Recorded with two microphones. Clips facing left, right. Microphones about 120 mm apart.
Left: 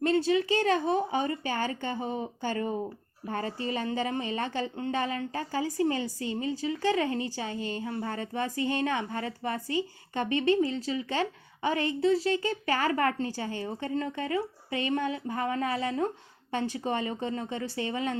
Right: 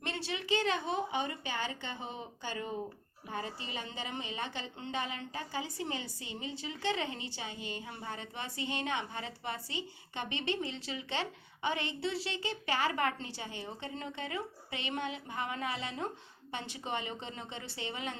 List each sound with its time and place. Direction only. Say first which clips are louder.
0.0 s a woman's voice: left 14 dB; 40° left (ahead or behind)